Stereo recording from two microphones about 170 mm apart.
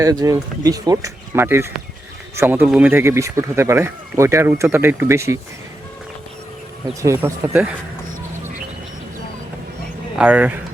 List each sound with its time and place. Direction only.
0.0 s speech: 20° right (ahead or behind)
7.0 s speech: 15° right (ahead or behind)
10.2 s speech: 10° right (ahead or behind)